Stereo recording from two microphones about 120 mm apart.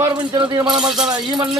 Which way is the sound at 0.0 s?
30° right (ahead or behind).